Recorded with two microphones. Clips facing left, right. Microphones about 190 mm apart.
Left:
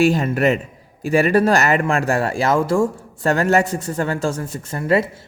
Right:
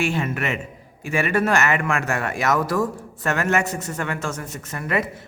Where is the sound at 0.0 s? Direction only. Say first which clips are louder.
Left 8 dB; 35° left (ahead or behind).